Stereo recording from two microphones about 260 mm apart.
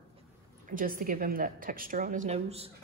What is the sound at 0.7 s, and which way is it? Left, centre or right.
A woman's voice, right.